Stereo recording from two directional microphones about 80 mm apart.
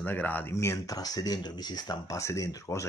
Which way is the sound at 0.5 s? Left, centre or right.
Left.